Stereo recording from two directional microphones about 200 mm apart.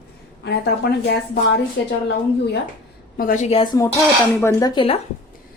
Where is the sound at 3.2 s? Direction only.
40° left (ahead or behind).